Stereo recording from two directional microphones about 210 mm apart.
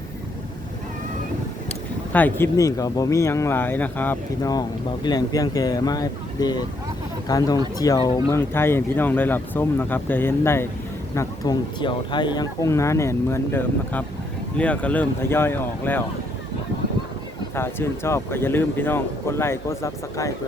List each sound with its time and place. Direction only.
2.1 s speech: 10° left (ahead or behind)
17.5 s speech: 10° left (ahead or behind)